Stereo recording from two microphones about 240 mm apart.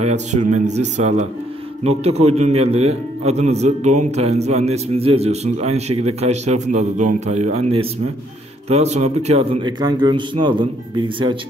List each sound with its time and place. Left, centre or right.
0.0 s a man's voice: right